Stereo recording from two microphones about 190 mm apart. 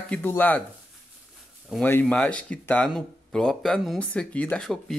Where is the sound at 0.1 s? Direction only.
10° left (ahead or behind).